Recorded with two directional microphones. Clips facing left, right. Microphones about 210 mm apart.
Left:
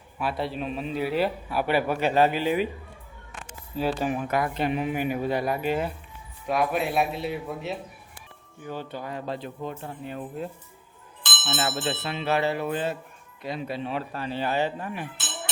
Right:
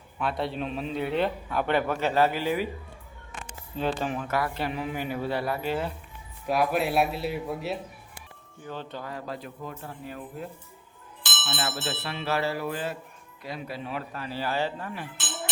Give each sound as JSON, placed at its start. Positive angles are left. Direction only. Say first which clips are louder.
{"t": 0.2, "sound": "a man's voice", "louder": "even", "side_deg": 5}
{"t": 3.8, "sound": "a man's voice", "louder": "left 2 dB", "side_deg": 10}
{"t": 6.5, "sound": "speech", "louder": "even", "side_deg": 0}
{"t": 8.6, "sound": "speech", "louder": "left 2 dB", "side_deg": 10}